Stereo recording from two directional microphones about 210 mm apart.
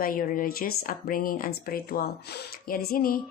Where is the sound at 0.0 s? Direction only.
40° left (ahead or behind).